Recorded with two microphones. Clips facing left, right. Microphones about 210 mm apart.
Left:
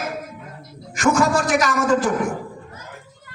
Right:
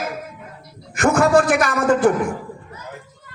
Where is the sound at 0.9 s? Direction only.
55° right (ahead or behind).